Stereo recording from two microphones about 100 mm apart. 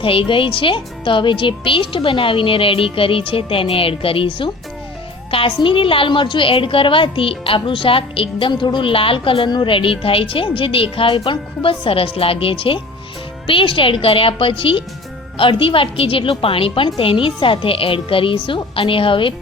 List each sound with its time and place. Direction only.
0.0 s speech: 60° left (ahead or behind)